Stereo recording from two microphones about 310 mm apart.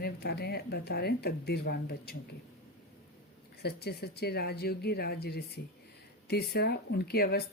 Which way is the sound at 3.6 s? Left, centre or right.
Left.